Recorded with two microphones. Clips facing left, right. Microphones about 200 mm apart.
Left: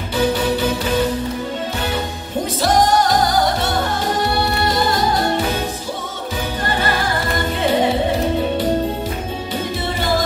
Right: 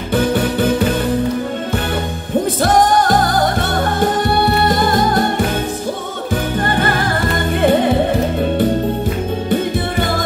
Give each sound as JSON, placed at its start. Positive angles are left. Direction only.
{"t": 0.1, "sound": "music", "side_deg": -55}
{"t": 2.6, "sound": "music", "side_deg": -55}
{"t": 6.6, "sound": "music", "side_deg": -50}
{"t": 9.5, "sound": "music", "side_deg": -55}